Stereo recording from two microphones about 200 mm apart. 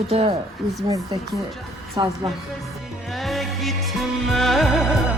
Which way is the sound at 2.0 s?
20° right (ahead or behind).